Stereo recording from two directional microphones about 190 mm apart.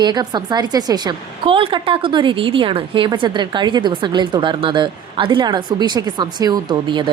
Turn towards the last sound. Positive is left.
turn(degrees=-25)  # may be behind; listen again after turning